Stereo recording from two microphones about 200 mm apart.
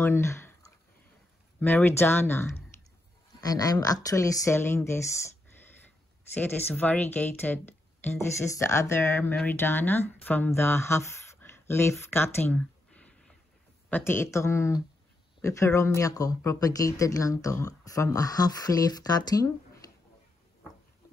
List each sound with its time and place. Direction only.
0.0 s speech: 10° left (ahead or behind)
1.6 s speech: 10° left (ahead or behind)
6.3 s speech: 10° left (ahead or behind)
12.1 s a sound: 10° left (ahead or behind)
13.8 s speech: 10° left (ahead or behind)
19.8 s a sound: 20° left (ahead or behind)